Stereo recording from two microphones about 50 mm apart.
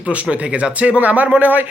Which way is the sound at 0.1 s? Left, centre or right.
Right.